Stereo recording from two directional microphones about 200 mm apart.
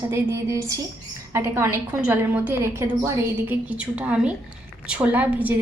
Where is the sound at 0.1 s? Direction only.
10° right (ahead or behind).